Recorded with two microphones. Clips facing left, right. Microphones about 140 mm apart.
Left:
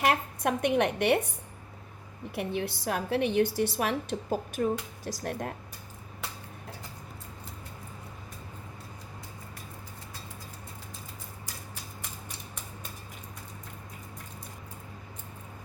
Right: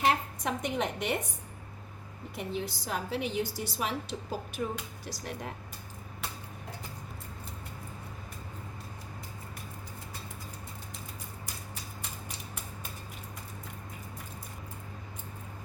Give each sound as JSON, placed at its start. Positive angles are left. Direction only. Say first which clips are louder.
{"t": 0.0, "sound": "a woman's voice", "louder": "left 2 dB", "side_deg": 65}
{"t": 2.3, "sound": "a woman's voice", "louder": "left 4 dB", "side_deg": 65}